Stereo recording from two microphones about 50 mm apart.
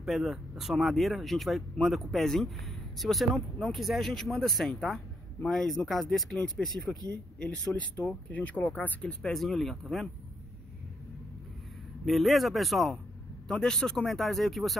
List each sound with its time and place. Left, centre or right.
0.0 s speech: centre
7.3 s speech: left
9.2 s speech: centre
12.1 s speech: centre